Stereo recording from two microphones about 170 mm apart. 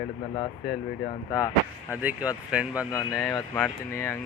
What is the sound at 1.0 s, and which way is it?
Speech, 20° left (ahead or behind).